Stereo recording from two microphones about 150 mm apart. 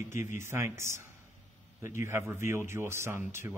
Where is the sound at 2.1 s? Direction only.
15° right (ahead or behind).